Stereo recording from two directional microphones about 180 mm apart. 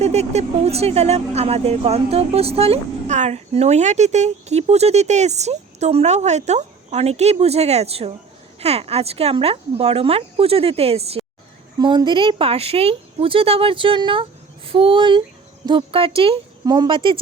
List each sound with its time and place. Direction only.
0.0 s speech: 35° right (ahead or behind)